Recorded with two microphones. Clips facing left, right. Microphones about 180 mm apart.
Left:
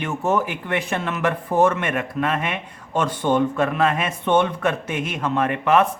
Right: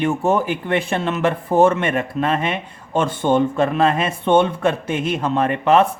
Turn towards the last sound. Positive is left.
turn(degrees=-30)  # may be behind; listen again after turning